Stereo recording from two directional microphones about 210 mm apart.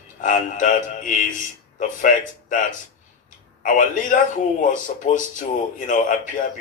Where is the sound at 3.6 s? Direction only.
40° left (ahead or behind).